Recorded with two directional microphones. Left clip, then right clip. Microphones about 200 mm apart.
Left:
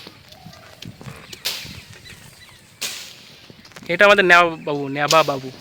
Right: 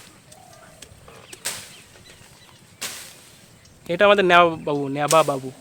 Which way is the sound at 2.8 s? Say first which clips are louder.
Left 4 dB; 30° left (ahead or behind).